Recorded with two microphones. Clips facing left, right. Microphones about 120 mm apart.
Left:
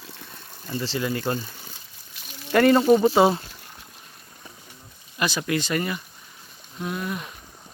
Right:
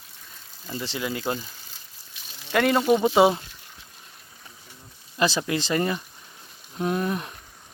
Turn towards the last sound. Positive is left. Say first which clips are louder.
# right 4 dB
turn(degrees=-45)  # may be behind; listen again after turning